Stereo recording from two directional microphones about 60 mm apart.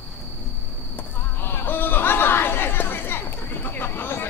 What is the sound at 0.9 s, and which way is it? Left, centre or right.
Insect, left.